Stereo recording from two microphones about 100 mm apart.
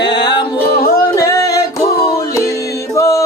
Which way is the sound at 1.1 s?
35° left (ahead or behind).